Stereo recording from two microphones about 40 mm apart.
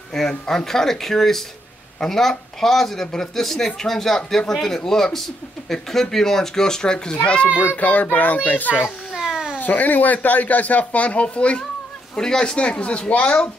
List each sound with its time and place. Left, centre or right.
0.1 s a man's voice: centre
7.2 s speech: left
7.7 s speech: left
9.1 s cat: centre
9.6 s speech: left
12.2 s speech: centre